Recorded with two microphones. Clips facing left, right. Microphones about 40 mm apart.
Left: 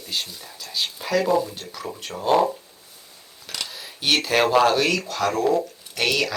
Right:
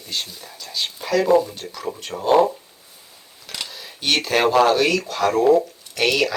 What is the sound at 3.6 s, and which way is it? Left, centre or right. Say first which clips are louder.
Speech: even; centre.